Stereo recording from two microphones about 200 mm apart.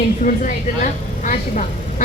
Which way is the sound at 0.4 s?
40° left (ahead or behind).